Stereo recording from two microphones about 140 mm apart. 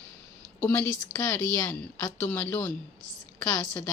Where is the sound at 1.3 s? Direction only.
10° left (ahead or behind).